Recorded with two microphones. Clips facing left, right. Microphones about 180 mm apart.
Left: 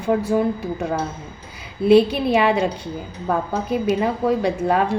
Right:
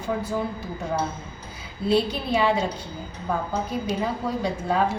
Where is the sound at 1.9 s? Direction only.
65° left (ahead or behind).